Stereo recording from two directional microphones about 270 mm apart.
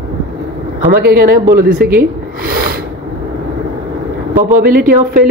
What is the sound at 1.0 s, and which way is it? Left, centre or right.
Speech, right.